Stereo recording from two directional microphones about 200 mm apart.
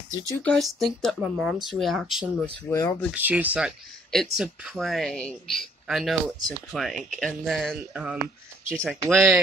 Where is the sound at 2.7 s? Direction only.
15° left (ahead or behind).